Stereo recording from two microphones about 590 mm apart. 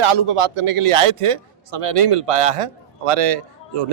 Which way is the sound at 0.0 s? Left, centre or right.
Right.